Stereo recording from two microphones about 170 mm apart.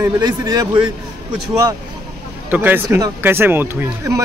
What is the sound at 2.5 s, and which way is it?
Speech, 10° right (ahead or behind).